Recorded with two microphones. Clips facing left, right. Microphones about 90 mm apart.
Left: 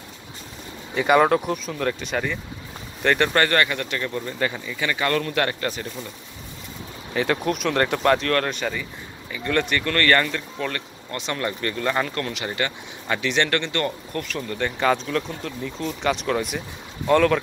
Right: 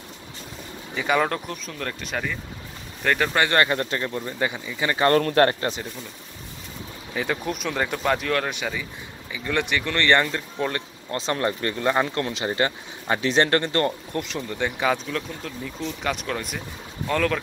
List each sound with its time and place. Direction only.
0.9 s speech: 5° left (ahead or behind)
3.4 s speech: 30° right (ahead or behind)
4.8 s speech: 35° right (ahead or behind)
5.6 s speech: 25° right (ahead or behind)
7.2 s speech: centre (ahead or behind); by 14.6 s 25° right (ahead or behind)
14.6 s speech: 5° right (ahead or behind)